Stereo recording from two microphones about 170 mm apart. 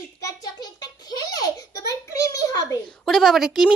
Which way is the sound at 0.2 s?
20° left (ahead or behind).